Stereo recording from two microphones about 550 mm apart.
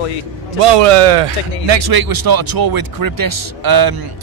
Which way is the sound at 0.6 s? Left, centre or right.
Right.